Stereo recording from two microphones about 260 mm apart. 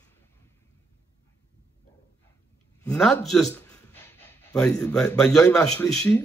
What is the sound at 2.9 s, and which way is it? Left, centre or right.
A man's voice, centre.